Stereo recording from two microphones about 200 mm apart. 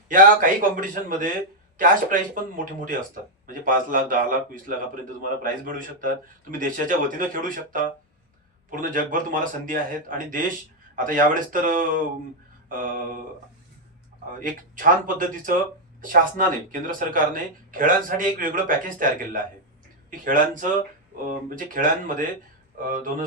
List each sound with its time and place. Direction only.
0.1 s speech: 40° right (ahead or behind)
3.4 s speech: 40° right (ahead or behind)
14.3 s speech: 40° right (ahead or behind)